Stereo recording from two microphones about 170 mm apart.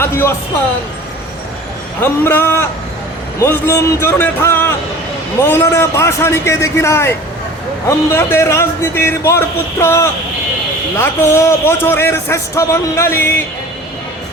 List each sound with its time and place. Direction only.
0.0 s a man's voice: 15° left (ahead or behind)
2.0 s a man's voice: 15° left (ahead or behind)